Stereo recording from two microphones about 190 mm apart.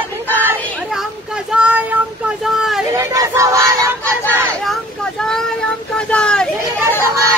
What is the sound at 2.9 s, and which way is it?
Speech, 15° right (ahead or behind).